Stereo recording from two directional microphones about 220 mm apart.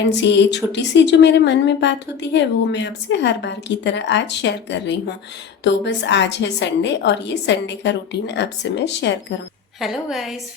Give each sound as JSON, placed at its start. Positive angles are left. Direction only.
{"t": 0.0, "sound": "speech", "side_deg": 50}
{"t": 9.8, "sound": "a woman's voice", "side_deg": 0}